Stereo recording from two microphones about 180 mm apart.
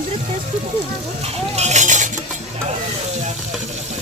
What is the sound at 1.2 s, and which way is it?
Cutlery, 35° right (ahead or behind).